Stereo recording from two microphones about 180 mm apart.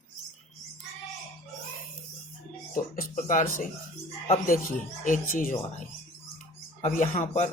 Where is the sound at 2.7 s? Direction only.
50° left (ahead or behind).